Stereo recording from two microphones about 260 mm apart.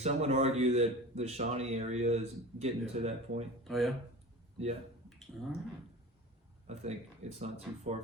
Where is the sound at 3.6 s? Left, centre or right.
Centre.